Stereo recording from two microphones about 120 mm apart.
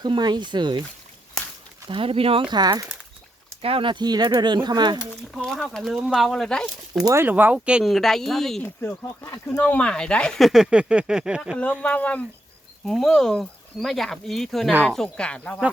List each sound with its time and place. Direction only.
0.0 s speech: 35° right (ahead or behind)
1.9 s speech: 50° right (ahead or behind)
3.6 s speech: 50° right (ahead or behind)
5.4 s speech: 10° left (ahead or behind)
5.8 s speech: 5° right (ahead or behind)
7.0 s speech: 25° right (ahead or behind)
7.3 s speech: 15° right (ahead or behind); by 8.6 s 5° left (ahead or behind)
8.6 s speech: 20° left (ahead or behind)
9.6 s speech: 10° left (ahead or behind); by 11.5 s 5° right (ahead or behind)
11.8 s speech: 10° left (ahead or behind)